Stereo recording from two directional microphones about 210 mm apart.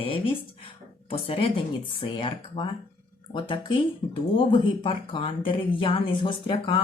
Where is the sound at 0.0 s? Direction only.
25° left (ahead or behind).